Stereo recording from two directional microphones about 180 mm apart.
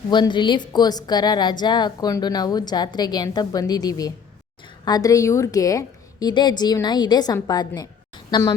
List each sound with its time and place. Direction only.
0.1 s a woman's voice: 25° left (ahead or behind)